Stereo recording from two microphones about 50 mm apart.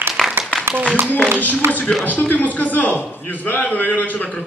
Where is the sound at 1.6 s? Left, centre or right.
Right.